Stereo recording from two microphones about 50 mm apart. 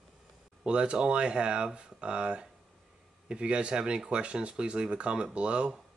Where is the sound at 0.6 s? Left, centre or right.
Centre.